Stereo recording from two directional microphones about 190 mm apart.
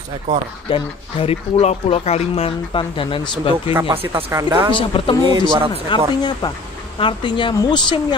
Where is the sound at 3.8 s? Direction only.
30° right (ahead or behind).